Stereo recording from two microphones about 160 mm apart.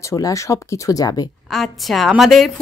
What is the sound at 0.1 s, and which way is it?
Speech, 20° left (ahead or behind).